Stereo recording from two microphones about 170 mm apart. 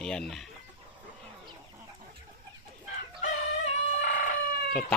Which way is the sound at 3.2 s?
45° left (ahead or behind).